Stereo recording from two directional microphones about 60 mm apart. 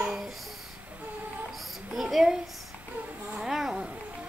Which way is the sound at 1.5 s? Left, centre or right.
Centre.